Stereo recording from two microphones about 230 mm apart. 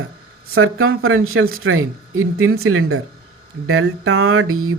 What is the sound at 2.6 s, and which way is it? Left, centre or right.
Speech, right.